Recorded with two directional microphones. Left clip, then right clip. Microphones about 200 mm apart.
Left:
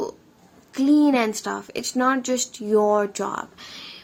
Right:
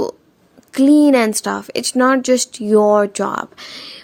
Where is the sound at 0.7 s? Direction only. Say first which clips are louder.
Right 7 dB; 45° right (ahead or behind).